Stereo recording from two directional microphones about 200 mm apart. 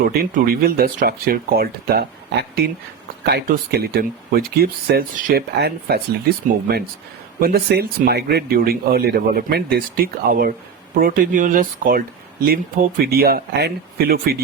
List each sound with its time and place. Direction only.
0.0 s speech: 45° right (ahead or behind)
7.3 s speech: 50° right (ahead or behind)